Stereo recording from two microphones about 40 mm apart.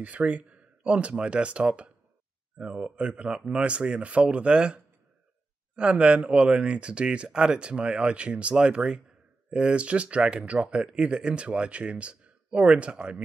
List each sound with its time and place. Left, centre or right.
0.0 s speech: right